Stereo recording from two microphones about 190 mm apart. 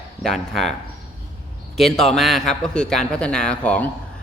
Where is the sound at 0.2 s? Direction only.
Centre (ahead or behind).